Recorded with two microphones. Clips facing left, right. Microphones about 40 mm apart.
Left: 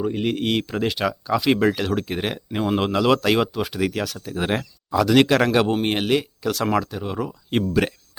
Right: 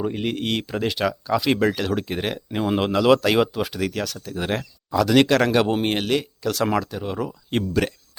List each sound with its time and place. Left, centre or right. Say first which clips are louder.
0.0 s speech: left 2 dB; centre